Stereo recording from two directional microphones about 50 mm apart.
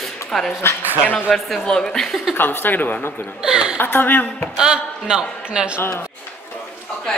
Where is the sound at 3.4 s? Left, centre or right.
Centre.